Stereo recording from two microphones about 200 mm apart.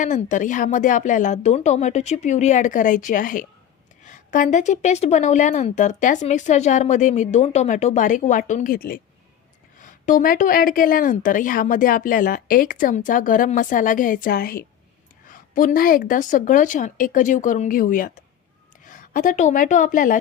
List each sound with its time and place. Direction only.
0.0 s a woman's voice: 40° left (ahead or behind)